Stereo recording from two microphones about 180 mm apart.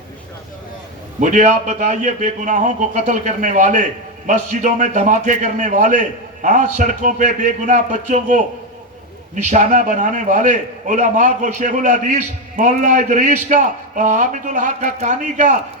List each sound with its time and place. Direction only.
1.2 s a man's voice: 45° right (ahead or behind)